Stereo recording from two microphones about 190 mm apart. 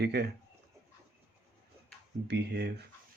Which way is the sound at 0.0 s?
60° right (ahead or behind).